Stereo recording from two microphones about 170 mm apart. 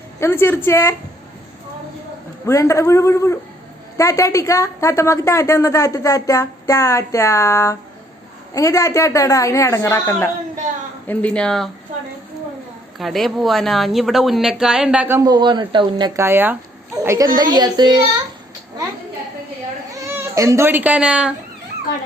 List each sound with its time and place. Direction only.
0.2 s a woman's voice: 15° left (ahead or behind)
2.5 s a woman's voice: 15° left (ahead or behind)
13.0 s a woman's voice: centre (ahead or behind); by 18.0 s 25° right (ahead or behind)
20.1 s speech: 15° right (ahead or behind)